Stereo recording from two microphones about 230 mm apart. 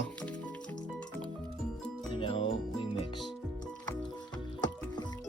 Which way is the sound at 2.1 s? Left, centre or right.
Left.